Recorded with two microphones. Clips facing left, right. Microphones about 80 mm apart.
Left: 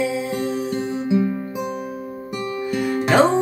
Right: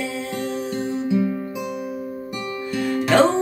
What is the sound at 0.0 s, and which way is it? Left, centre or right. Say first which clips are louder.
Music: left 4 dB; centre.